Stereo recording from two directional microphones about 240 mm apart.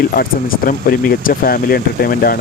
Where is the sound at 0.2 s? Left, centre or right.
Left.